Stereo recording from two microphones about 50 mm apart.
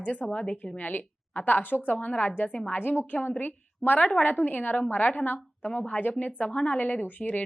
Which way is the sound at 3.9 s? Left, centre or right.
Left.